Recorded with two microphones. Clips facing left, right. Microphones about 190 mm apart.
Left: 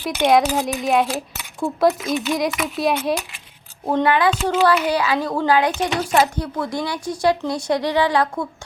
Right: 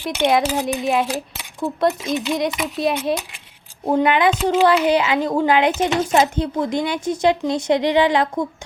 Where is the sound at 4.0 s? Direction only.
20° right (ahead or behind).